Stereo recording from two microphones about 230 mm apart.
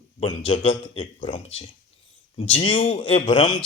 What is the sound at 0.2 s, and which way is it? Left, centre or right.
Speech, left.